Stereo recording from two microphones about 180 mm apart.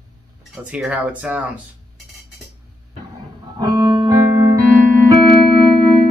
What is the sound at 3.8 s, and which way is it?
Music, 20° right (ahead or behind).